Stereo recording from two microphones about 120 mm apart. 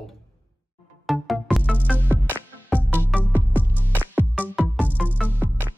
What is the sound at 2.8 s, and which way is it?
Music, 15° left (ahead or behind).